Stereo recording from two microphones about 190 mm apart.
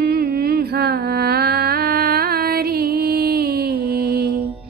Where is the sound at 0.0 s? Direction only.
55° right (ahead or behind).